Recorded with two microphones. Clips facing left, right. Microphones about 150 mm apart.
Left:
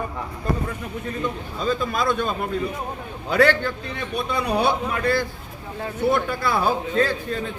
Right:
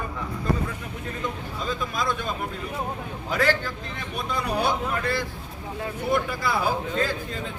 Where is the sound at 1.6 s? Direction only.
65° left (ahead or behind).